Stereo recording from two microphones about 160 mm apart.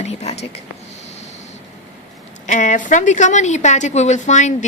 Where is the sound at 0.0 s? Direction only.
40° left (ahead or behind).